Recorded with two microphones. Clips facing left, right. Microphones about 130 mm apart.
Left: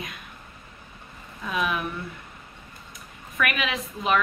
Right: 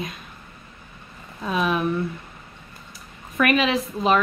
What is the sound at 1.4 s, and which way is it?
Speech, 30° right (ahead or behind).